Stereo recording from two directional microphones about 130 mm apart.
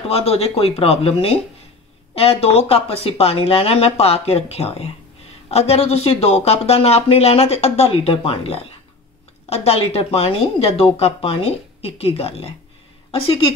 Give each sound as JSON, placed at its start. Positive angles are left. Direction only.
{"t": 0.1, "sound": "speech", "side_deg": 50}